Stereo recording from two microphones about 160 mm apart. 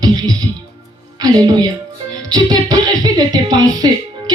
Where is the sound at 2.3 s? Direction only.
25° right (ahead or behind).